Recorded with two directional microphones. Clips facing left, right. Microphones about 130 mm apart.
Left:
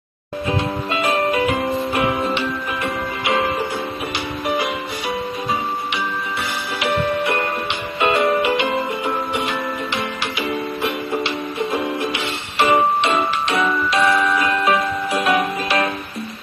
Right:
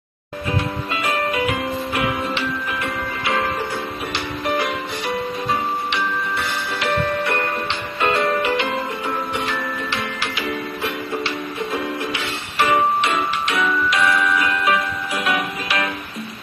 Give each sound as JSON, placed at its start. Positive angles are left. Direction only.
{"t": 0.5, "sound": "music", "side_deg": 25}
{"t": 6.8, "sound": "music", "side_deg": 15}
{"t": 12.5, "sound": "music", "side_deg": 25}